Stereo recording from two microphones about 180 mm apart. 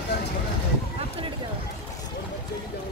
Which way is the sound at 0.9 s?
30° right (ahead or behind).